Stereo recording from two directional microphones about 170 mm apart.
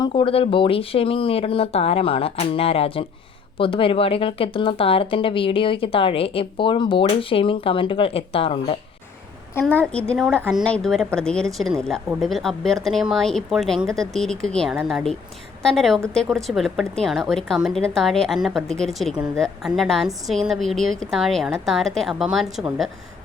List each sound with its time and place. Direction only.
0.0 s speech: 30° left (ahead or behind)
9.6 s a woman's voice: 10° left (ahead or behind)